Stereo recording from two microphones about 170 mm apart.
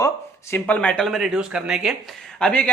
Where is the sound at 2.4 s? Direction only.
5° left (ahead or behind).